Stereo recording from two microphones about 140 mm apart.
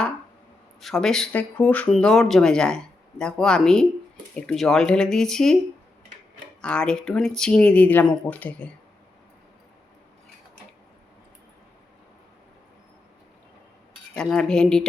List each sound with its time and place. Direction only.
0.8 s speech: centre (ahead or behind)
6.6 s speech: 5° left (ahead or behind)
14.1 s speech: 5° left (ahead or behind)